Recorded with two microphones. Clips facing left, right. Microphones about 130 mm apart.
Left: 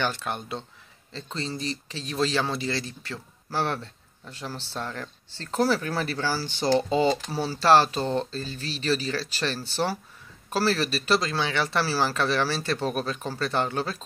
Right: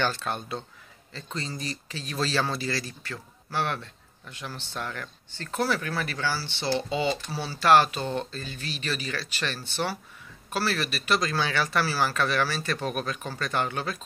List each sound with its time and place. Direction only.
0.0 s a man's voice: 15° left (ahead or behind); by 14.0 s 30° left (ahead or behind)